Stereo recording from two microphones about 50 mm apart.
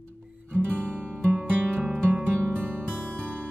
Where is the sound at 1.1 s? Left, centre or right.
Right.